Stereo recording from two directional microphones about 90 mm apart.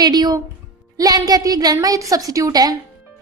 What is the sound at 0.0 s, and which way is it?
A woman's voice, 50° right (ahead or behind).